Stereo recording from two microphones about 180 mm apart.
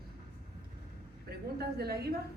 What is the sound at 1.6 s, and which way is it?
Speech, 60° right (ahead or behind).